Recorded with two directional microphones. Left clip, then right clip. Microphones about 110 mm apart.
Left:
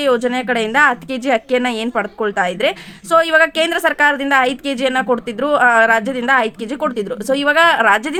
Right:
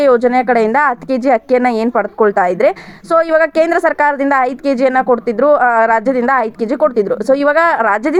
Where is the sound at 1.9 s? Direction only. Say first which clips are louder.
Right 7 dB; 20° left (ahead or behind).